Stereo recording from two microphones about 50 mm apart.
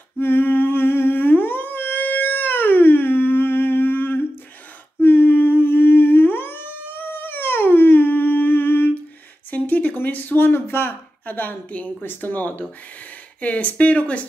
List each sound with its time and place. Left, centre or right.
0.2 s humming: left
5.0 s howl: left
9.5 s a sound: left
10.5 s a woman's voice: left